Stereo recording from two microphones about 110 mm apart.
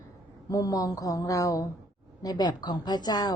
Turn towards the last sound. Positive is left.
turn(degrees=35)  # may be behind; listen again after turning